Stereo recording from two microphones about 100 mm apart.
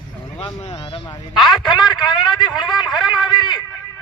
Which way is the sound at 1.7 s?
50° left (ahead or behind).